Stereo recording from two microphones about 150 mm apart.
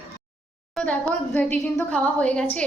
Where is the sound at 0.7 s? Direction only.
10° left (ahead or behind).